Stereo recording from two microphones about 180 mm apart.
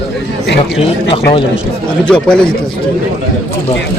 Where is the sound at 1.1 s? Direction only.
30° left (ahead or behind).